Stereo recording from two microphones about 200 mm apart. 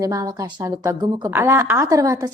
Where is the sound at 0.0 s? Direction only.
15° right (ahead or behind).